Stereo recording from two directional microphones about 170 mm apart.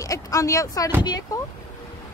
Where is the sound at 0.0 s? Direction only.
20° left (ahead or behind).